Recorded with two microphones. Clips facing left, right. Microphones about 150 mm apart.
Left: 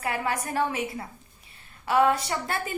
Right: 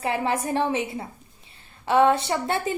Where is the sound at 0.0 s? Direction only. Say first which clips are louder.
Right 4 dB; 25° right (ahead or behind).